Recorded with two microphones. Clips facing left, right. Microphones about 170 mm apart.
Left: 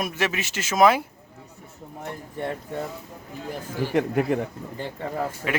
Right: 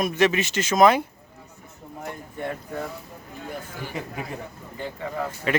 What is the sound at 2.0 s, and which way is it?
Speech, 30° left (ahead or behind).